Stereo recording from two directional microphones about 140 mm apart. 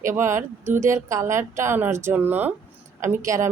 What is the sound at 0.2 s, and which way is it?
Speech, 20° right (ahead or behind).